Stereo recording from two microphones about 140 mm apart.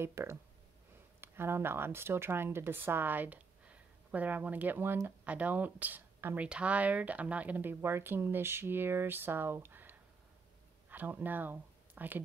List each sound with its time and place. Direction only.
0.0 s speech: 20° right (ahead or behind)